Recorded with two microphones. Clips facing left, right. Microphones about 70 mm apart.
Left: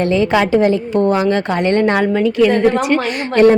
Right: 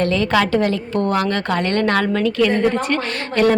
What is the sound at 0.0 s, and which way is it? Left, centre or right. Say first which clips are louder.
A woman's voice: left 3 dB; centre.